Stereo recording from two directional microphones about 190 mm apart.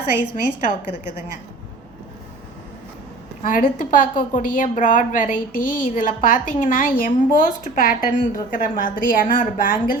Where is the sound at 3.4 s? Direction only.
45° left (ahead or behind).